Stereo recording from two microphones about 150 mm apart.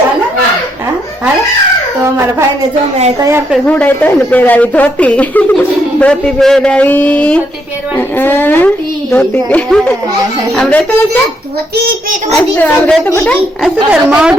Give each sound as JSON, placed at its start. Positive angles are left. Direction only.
{"t": 3.2, "sound": "a woman's voice", "side_deg": -20}
{"t": 3.7, "sound": "speech", "side_deg": 10}
{"t": 12.3, "sound": "speech", "side_deg": 10}
{"t": 13.6, "sound": "a woman's voice", "side_deg": -5}